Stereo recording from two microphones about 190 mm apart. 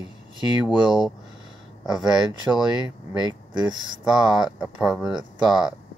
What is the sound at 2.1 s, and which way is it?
Speech, 20° right (ahead or behind).